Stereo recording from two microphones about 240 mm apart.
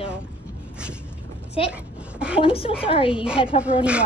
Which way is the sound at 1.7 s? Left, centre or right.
Centre.